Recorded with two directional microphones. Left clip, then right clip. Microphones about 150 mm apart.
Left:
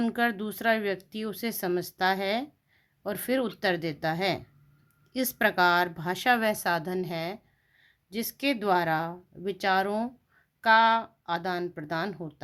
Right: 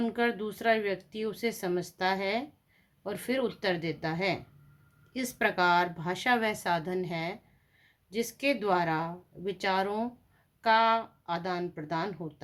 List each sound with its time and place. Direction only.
0.0 s speech: 45° left (ahead or behind)